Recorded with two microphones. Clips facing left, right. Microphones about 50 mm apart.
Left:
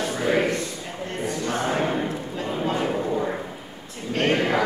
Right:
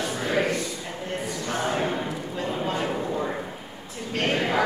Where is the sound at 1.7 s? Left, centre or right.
Centre.